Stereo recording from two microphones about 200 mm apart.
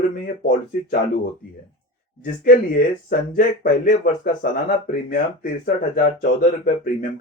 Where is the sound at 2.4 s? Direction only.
45° left (ahead or behind).